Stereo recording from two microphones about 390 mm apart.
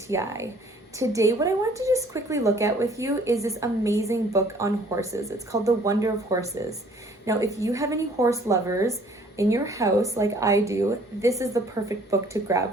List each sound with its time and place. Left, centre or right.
0.1 s speech: centre